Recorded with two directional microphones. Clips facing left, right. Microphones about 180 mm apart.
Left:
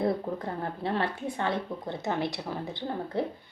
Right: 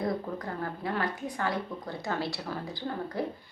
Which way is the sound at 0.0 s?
25° left (ahead or behind).